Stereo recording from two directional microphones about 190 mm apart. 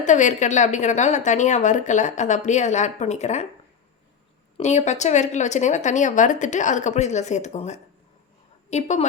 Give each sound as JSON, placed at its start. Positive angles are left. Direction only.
{"t": 0.0, "sound": "speech", "side_deg": 40}
{"t": 4.5, "sound": "speech", "side_deg": 35}